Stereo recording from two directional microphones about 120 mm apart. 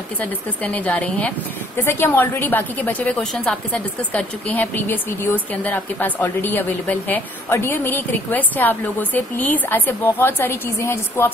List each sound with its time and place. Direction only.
0.2 s a woman's voice: 10° left (ahead or behind)